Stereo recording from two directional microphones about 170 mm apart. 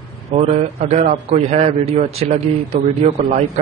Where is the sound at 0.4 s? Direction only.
40° right (ahead or behind).